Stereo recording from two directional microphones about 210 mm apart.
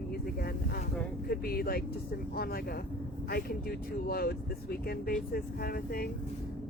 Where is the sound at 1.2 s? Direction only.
45° left (ahead or behind).